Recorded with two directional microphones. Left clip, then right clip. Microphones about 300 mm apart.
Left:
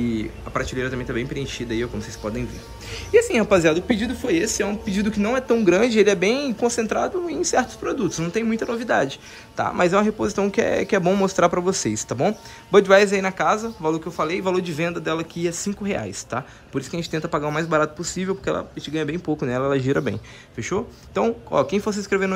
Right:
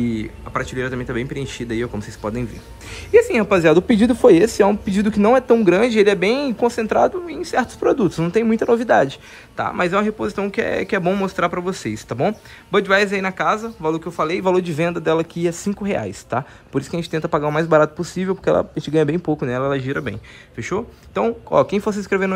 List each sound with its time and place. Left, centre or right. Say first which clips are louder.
0.0 s speech: right 2 dB; centre